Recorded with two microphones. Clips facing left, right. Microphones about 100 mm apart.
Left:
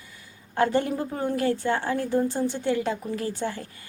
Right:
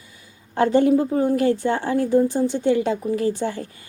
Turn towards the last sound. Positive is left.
turn(degrees=-20)  # may be behind; listen again after turning